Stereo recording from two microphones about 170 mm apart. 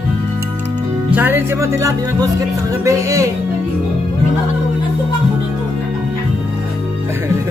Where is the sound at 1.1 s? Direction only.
10° right (ahead or behind).